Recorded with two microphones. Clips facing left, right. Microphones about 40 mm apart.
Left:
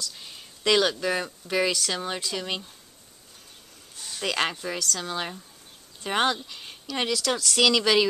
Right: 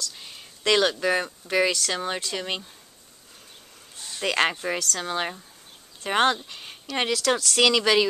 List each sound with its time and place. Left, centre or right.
0.1 s speech: centre
3.9 s a sound: centre
4.5 s speech: right
4.7 s speech: centre
5.0 s speech: right